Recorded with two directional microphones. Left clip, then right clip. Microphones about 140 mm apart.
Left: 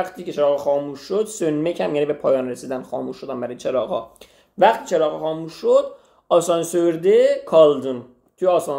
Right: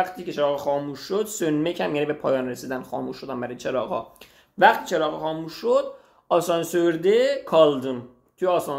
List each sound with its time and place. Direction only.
0.0 s speech: 10° left (ahead or behind)
4.6 s speech: centre (ahead or behind)